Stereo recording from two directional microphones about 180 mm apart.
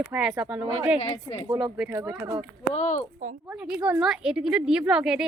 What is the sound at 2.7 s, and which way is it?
Speech, 40° left (ahead or behind).